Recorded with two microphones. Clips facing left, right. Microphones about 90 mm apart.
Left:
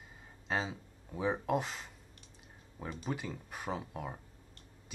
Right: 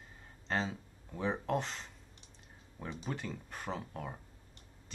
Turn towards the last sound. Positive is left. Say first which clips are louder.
# left 1 dB
turn(degrees=5)  # may be behind; listen again after turning